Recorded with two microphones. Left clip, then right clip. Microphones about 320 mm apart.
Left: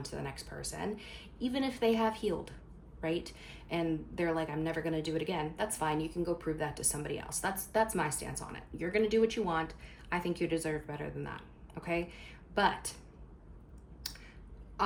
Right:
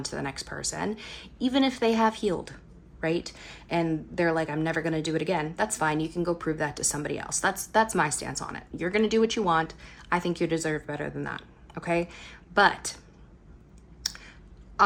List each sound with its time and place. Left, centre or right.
0.0 s a woman's voice: right
14.0 s a sound: right
14.8 s a woman's voice: right